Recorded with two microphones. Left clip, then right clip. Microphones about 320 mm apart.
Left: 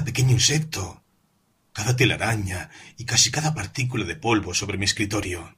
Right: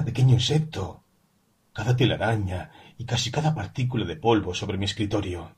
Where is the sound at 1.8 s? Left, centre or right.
Left.